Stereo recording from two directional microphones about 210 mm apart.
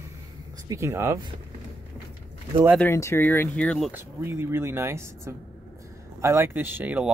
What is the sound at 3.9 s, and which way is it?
Speech, 10° right (ahead or behind).